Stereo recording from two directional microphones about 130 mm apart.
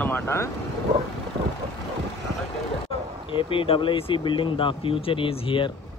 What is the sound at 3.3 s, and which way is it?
Speech, 45° left (ahead or behind).